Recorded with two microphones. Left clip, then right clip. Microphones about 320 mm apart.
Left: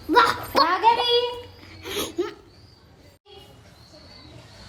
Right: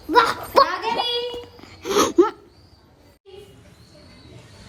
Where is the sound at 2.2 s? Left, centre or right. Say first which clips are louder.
Right 12 dB; right.